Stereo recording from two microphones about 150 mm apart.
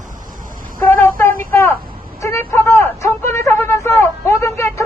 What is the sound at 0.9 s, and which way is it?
Chicken, 15° left (ahead or behind).